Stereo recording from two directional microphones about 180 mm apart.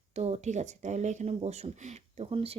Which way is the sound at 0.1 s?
35° right (ahead or behind).